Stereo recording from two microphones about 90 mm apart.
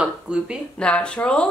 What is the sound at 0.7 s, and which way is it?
Speech, 10° left (ahead or behind).